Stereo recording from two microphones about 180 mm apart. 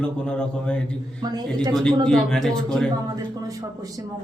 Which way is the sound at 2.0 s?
5° left (ahead or behind).